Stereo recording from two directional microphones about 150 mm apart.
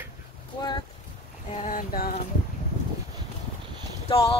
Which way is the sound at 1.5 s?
60° left (ahead or behind).